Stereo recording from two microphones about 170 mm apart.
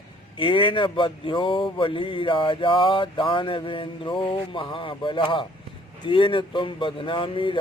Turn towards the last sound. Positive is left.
turn(degrees=30)  # may be behind; listen again after turning